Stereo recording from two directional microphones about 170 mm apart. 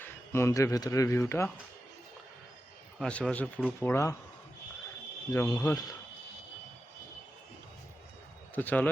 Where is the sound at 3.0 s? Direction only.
5° left (ahead or behind).